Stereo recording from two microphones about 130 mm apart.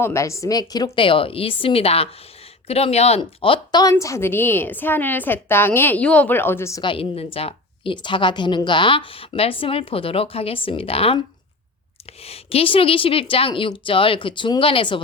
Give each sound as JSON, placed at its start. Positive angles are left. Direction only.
{"t": 0.0, "sound": "a woman's voice", "side_deg": 20}
{"t": 3.2, "sound": "speech", "side_deg": 40}
{"t": 3.8, "sound": "a woman's voice", "side_deg": 25}
{"t": 6.8, "sound": "a woman's voice", "side_deg": 45}
{"t": 12.2, "sound": "a woman's voice", "side_deg": 50}